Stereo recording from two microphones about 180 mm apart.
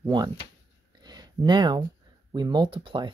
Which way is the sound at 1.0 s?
25° right (ahead or behind).